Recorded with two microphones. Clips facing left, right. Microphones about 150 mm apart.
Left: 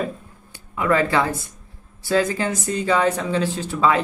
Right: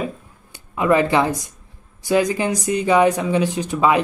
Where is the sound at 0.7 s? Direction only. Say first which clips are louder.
Right 3 dB; 20° right (ahead or behind).